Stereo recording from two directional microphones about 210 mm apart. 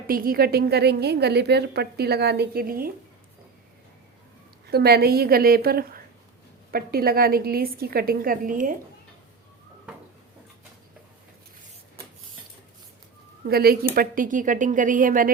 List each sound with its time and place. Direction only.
0.1 s a woman's voice: 45° right (ahead or behind)
4.7 s a woman's voice: 50° right (ahead or behind)
13.5 s a woman's voice: 45° right (ahead or behind)